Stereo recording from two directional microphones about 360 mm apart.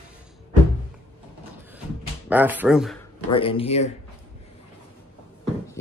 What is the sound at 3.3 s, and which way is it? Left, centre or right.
Speech, centre.